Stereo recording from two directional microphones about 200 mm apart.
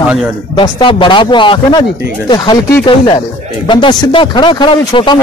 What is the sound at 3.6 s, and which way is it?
Speech, 25° left (ahead or behind).